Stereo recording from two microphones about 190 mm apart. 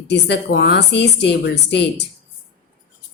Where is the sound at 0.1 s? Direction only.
60° left (ahead or behind).